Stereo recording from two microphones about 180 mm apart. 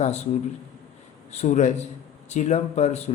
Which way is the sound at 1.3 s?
40° left (ahead or behind).